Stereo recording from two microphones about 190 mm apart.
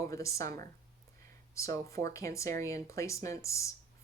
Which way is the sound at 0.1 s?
15° left (ahead or behind).